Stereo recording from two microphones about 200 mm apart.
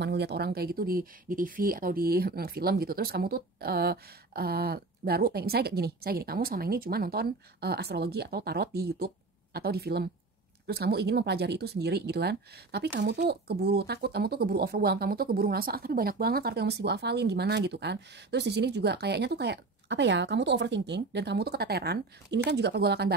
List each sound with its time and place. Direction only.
0.0 s speech: 55° right (ahead or behind)